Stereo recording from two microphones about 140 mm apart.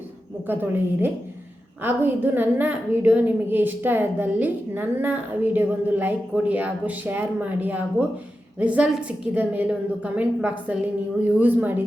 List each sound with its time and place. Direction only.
0.4 s a woman's voice: 15° right (ahead or behind)